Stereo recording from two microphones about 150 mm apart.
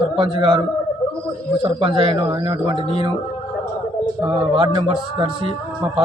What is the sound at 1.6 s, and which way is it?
A man's voice, 35° right (ahead or behind).